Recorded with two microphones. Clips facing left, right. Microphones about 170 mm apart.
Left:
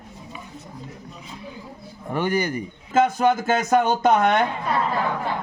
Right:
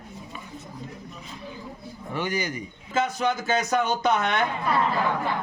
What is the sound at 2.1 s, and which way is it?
A man's voice, 55° left (ahead or behind).